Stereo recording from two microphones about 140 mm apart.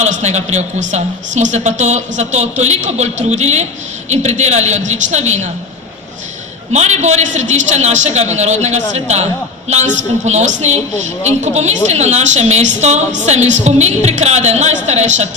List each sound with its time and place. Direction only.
0.0 s a man's voice: 55° right (ahead or behind)
6.7 s a woman's voice: 50° right (ahead or behind)